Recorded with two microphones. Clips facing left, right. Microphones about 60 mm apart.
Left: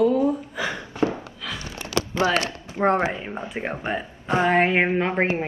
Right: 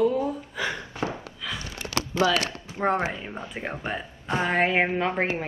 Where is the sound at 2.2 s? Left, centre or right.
Left.